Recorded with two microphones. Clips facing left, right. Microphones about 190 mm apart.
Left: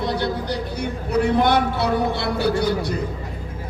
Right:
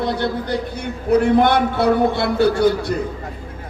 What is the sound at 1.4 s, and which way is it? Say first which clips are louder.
Speech: right 3 dB; 55° right (ahead or behind).